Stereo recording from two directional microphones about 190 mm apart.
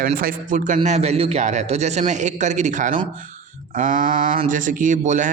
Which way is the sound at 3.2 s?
45° right (ahead or behind).